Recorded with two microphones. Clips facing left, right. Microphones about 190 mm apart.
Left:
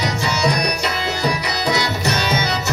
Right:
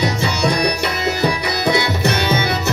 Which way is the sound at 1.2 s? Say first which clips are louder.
Right 2 dB; 55° right (ahead or behind).